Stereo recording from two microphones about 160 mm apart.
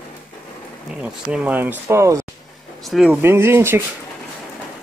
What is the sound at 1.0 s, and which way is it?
Speech, 5° right (ahead or behind).